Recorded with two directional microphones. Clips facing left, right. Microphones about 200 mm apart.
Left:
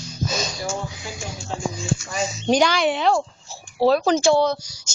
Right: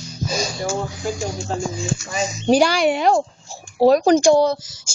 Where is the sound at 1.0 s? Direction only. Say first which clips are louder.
Right 10 dB; 45° right (ahead or behind).